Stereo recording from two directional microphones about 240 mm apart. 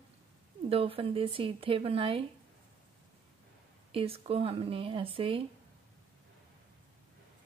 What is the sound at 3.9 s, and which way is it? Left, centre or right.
A woman's voice, right.